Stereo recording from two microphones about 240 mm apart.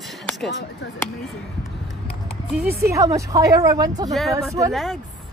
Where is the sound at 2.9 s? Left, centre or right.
Centre.